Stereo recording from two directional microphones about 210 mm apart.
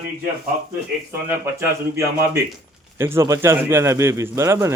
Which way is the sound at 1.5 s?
15° right (ahead or behind).